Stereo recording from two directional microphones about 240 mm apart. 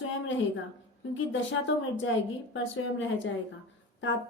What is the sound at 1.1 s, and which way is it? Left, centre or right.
Speech, left.